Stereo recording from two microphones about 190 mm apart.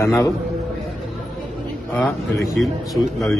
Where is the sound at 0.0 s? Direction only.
15° left (ahead or behind).